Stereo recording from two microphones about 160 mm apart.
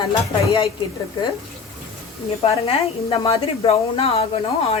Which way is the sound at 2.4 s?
35° left (ahead or behind).